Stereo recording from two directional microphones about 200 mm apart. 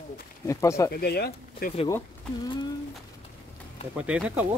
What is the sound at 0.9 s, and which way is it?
Speech, 50° left (ahead or behind).